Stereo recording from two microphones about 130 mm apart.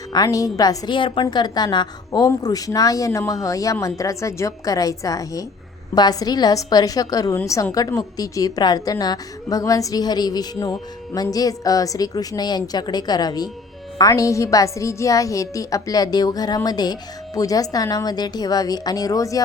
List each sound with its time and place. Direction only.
0.1 s a woman's voice: 30° left (ahead or behind)